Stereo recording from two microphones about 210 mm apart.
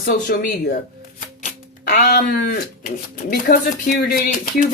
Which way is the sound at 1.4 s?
45° left (ahead or behind).